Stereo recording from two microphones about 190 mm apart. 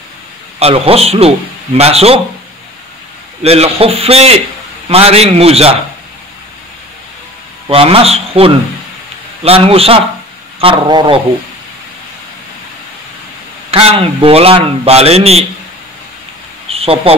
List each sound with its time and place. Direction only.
0.6 s a man's voice: 30° right (ahead or behind)
3.4 s a man's voice: 30° right (ahead or behind)
7.6 s a man's voice: 30° right (ahead or behind)
13.7 s a man's voice: 30° right (ahead or behind)
16.6 s a sound: 30° right (ahead or behind)